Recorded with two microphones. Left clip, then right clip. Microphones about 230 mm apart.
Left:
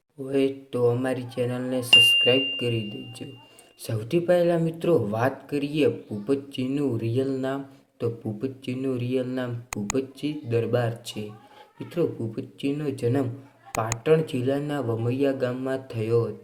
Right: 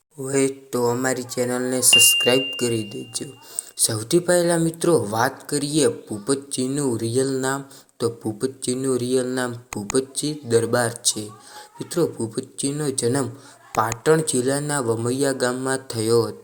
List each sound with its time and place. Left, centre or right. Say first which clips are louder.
0.7 s speech: right 2 dB; right
9.6 s speech: right 2 dB; centre
10.2 s speech: right 6 dB; right
11.9 s speech: right 4 dB; right